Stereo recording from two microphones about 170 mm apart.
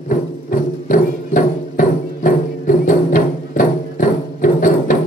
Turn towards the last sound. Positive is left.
turn(degrees=50)  # may be behind; listen again after turning